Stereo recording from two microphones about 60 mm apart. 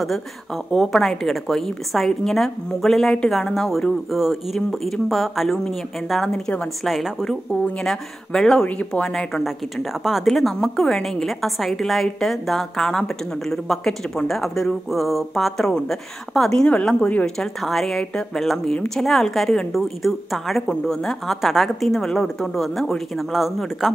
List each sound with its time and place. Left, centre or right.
0.7 s a woman's voice: centre
4.1 s a woman's voice: centre
4.6 s a woman's voice: centre
6.3 s speech: centre
6.8 s a woman's voice: centre
7.8 s speech: centre
8.6 s speech: centre
10.0 s a woman's voice: centre; by 17.3 s left
17.4 s a woman's voice: centre